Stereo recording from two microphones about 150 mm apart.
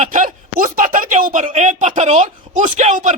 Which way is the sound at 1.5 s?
50° right (ahead or behind).